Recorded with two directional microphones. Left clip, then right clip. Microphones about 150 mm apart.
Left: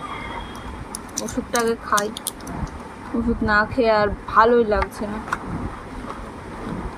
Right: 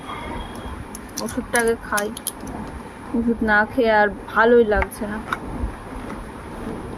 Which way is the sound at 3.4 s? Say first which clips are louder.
Even; 10° right (ahead or behind).